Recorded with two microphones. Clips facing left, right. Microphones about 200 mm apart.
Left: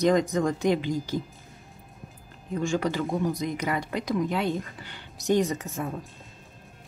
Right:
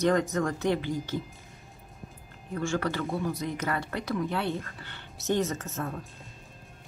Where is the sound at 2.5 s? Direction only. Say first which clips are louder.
Left 3 dB; 15° left (ahead or behind).